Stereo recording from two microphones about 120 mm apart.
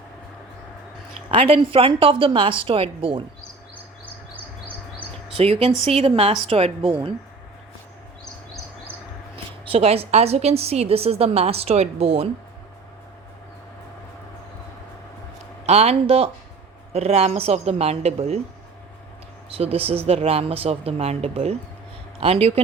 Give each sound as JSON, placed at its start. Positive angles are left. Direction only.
{"t": 1.3, "sound": "a woman's voice", "side_deg": -50}
{"t": 4.6, "sound": "chirp", "side_deg": -15}
{"t": 5.3, "sound": "a woman's voice", "side_deg": -55}
{"t": 9.3, "sound": "a woman's voice", "side_deg": -55}
{"t": 15.6, "sound": "a woman's voice", "side_deg": -60}
{"t": 19.5, "sound": "a woman's voice", "side_deg": -55}